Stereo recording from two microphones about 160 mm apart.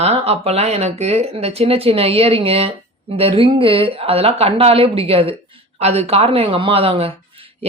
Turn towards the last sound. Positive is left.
turn(degrees=-35)  # may be behind; listen again after turning